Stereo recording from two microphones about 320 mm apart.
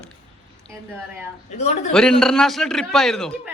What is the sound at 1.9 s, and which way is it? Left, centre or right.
Speech, centre.